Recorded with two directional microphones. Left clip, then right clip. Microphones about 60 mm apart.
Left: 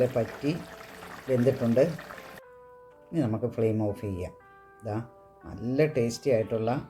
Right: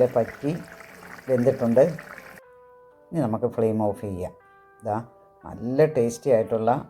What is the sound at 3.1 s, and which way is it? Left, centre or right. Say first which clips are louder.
Speech: right 5 dB; left.